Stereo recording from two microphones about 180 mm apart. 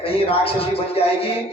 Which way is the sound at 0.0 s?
30° left (ahead or behind).